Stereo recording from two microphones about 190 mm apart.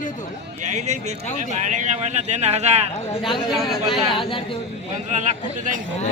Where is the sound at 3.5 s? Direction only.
Centre (ahead or behind).